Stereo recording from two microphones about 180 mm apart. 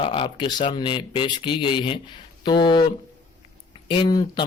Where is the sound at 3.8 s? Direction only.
25° left (ahead or behind).